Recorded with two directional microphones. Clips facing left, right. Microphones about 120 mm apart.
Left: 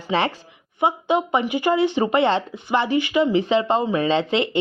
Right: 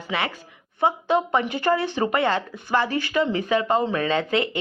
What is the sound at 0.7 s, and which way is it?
Speech, 15° left (ahead or behind).